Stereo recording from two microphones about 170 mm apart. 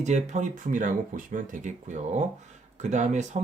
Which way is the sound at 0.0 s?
45° right (ahead or behind).